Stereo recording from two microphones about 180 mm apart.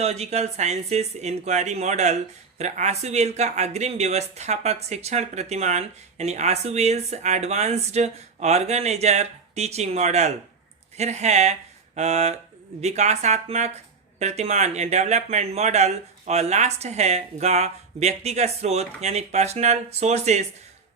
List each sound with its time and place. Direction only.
0.0 s speech: 35° right (ahead or behind)